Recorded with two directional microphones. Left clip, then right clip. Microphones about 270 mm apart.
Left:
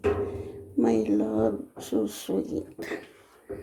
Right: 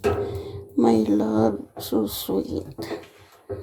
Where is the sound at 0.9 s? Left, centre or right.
Right.